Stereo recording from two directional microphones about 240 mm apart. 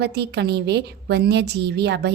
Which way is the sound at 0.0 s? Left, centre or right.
Right.